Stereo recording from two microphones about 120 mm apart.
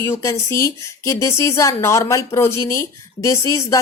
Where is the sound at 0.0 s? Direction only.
25° left (ahead or behind).